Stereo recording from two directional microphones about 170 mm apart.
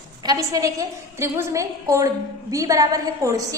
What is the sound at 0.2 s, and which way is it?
A woman's voice, 20° right (ahead or behind).